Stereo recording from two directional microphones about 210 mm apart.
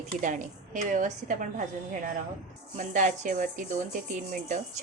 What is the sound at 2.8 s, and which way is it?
A woman's voice, 35° right (ahead or behind).